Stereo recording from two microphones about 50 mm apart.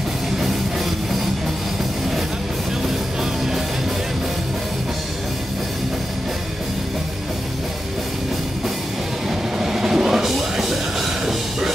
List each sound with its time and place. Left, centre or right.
9.3 s music: centre